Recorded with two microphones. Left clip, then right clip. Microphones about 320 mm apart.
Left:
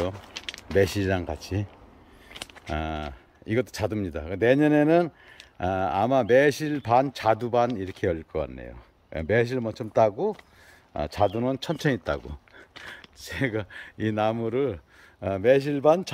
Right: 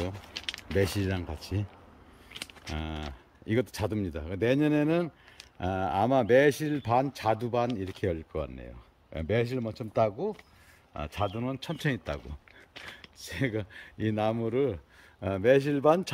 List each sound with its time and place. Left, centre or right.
0.0 s speech: centre
2.3 s a sound: centre
2.7 s speech: centre